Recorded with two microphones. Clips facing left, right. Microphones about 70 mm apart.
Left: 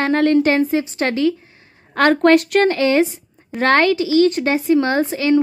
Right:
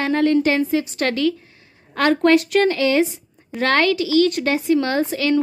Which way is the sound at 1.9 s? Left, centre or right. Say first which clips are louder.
Left 3 dB; left.